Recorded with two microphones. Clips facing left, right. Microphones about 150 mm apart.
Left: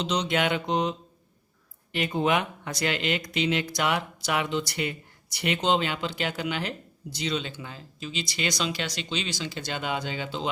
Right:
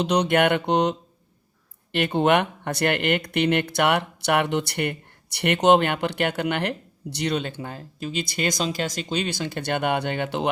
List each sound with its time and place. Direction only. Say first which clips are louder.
0.0 s speech: right 6 dB; 60° right (ahead or behind)